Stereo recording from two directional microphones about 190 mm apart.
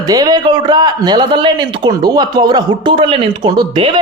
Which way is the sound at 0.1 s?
20° right (ahead or behind).